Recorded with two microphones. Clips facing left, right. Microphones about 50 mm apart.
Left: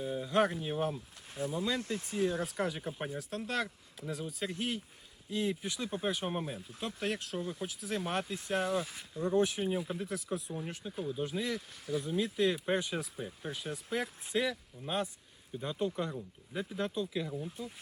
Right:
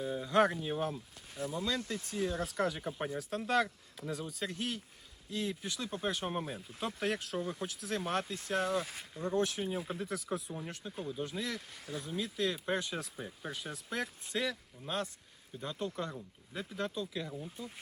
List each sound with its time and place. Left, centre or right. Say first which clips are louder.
0.0 s speech: right 1 dB; centre
9.8 s speech: left 1 dB; centre
11.9 s speech: left 5 dB; left; by 17.7 s centre